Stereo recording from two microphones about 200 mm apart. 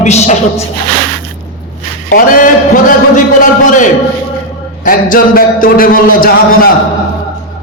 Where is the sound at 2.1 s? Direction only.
40° left (ahead or behind).